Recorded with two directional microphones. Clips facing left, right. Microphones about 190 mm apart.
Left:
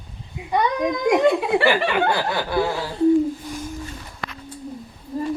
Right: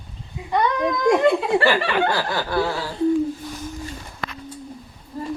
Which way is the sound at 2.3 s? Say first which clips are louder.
Left 1 dB; 15° left (ahead or behind).